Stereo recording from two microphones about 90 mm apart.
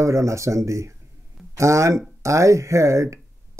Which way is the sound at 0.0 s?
35° right (ahead or behind).